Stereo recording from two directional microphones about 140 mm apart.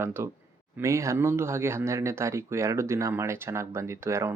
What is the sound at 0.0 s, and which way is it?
Speech, 15° right (ahead or behind).